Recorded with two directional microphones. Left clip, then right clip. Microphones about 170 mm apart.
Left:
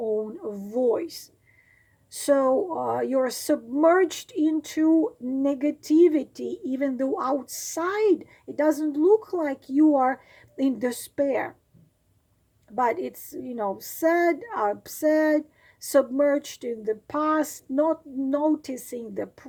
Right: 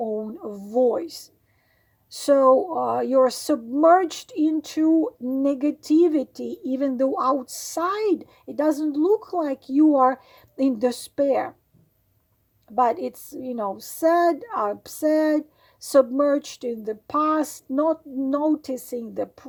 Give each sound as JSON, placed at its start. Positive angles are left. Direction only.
{"t": 0.2, "sound": "a sound", "side_deg": -25}
{"t": 2.0, "sound": "speech", "side_deg": -25}
{"t": 12.7, "sound": "speech", "side_deg": -30}